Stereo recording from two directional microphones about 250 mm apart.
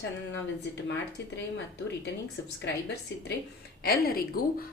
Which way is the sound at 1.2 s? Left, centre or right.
Left.